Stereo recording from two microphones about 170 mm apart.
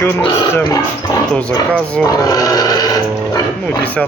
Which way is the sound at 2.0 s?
20° left (ahead or behind).